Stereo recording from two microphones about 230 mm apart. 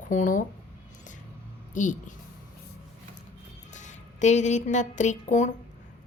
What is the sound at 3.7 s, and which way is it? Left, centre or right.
A woman's voice, left.